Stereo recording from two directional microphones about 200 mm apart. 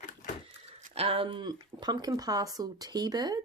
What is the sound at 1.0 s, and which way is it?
Speech, 30° right (ahead or behind).